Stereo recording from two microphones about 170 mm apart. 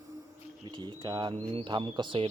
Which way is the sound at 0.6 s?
25° right (ahead or behind).